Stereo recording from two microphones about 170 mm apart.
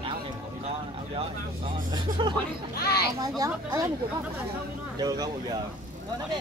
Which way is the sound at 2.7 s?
65° left (ahead or behind).